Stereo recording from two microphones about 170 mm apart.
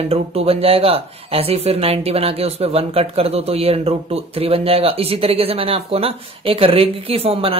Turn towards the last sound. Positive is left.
turn(degrees=-35)  # may be behind; listen again after turning